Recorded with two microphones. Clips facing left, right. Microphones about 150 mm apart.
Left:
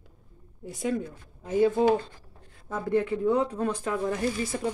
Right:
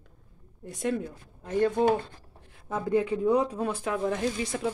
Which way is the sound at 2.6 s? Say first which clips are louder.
Even; 15° right (ahead or behind).